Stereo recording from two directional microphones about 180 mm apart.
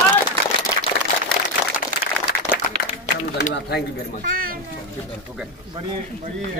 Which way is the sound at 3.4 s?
70° left (ahead or behind).